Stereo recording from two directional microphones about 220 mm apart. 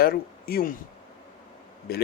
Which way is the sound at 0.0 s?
45° left (ahead or behind).